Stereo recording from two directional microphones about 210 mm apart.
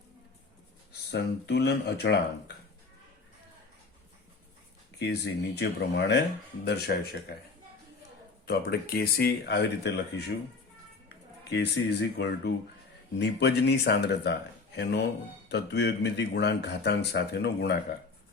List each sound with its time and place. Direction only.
1.1 s speech: 50° left (ahead or behind)
4.9 s speech: 55° left (ahead or behind)
8.4 s speech: 50° left (ahead or behind)
11.5 s speech: 50° left (ahead or behind)
15.4 s speech: 50° left (ahead or behind)